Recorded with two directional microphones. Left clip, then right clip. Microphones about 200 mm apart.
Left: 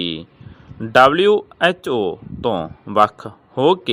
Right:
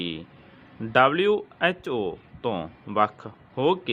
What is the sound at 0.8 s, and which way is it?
Speech, 35° left (ahead or behind).